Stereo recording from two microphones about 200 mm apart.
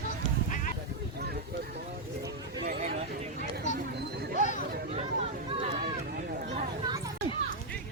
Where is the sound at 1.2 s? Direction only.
55° right (ahead or behind).